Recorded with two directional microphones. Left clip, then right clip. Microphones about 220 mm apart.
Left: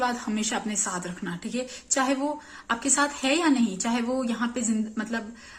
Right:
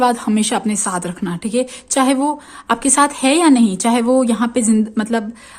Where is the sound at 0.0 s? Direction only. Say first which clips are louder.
Right 12 dB; 50° right (ahead or behind).